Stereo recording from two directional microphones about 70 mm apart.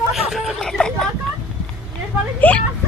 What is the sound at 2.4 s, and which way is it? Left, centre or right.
Speech, left.